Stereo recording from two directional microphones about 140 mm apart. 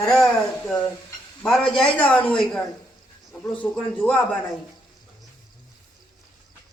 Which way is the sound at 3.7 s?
10° left (ahead or behind).